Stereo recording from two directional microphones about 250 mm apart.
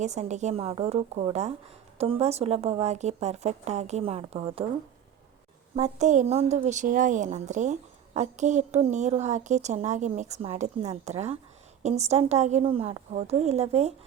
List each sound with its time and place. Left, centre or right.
0.0 s a woman's voice: right
5.7 s a woman's voice: right